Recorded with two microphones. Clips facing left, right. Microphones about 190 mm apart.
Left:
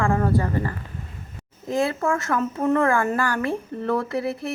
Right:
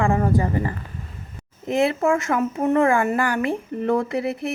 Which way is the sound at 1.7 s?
20° right (ahead or behind).